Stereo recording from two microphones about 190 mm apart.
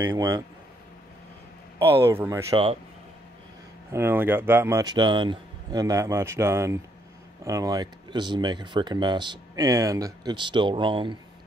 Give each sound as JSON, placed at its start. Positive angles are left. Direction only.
{"t": 0.0, "sound": "a man's voice", "side_deg": -15}
{"t": 1.8, "sound": "a man's voice", "side_deg": -15}
{"t": 2.5, "sound": "speech", "side_deg": -30}
{"t": 3.9, "sound": "a man's voice", "side_deg": -10}